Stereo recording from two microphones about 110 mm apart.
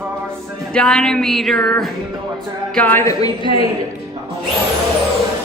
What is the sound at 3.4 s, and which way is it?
Speech, 50° left (ahead or behind).